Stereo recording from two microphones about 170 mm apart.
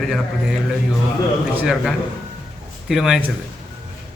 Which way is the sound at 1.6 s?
5° right (ahead or behind).